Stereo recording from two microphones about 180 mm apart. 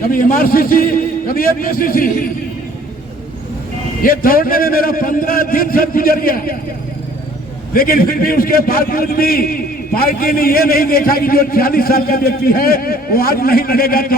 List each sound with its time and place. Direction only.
0.0 s a man's voice: 50° left (ahead or behind)
4.0 s a man's voice: 55° left (ahead or behind)
7.7 s a man's voice: 55° left (ahead or behind)